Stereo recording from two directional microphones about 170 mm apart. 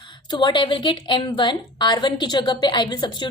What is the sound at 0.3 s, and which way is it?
A woman's voice, 25° left (ahead or behind).